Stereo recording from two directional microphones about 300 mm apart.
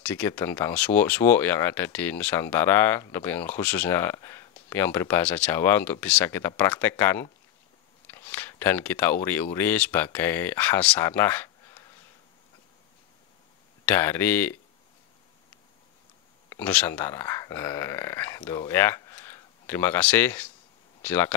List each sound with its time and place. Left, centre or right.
0.0 s speech: centre
13.8 s speech: centre
16.4 s speech: centre